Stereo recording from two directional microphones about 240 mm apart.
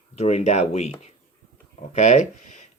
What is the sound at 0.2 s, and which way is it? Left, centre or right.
Speech, left.